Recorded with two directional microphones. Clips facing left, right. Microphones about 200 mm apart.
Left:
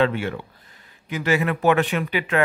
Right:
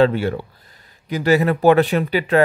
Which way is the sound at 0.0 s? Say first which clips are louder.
Right 5 dB; 35° right (ahead or behind).